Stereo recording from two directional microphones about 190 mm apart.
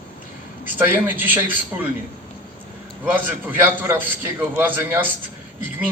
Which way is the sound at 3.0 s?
10° right (ahead or behind).